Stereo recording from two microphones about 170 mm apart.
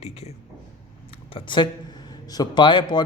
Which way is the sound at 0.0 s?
40° left (ahead or behind).